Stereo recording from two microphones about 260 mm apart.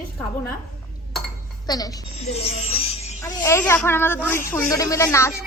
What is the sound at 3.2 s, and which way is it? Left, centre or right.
Speech, centre.